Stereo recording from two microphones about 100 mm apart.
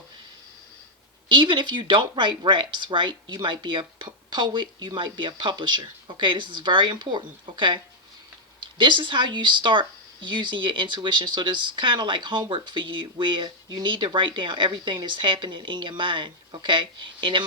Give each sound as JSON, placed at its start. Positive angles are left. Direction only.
{"t": 1.3, "sound": "speech", "side_deg": -55}
{"t": 8.8, "sound": "a woman's voice", "side_deg": -55}